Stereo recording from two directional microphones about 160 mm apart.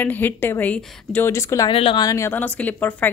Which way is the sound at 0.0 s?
10° left (ahead or behind).